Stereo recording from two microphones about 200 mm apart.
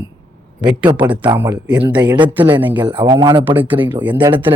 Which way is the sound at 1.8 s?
20° right (ahead or behind).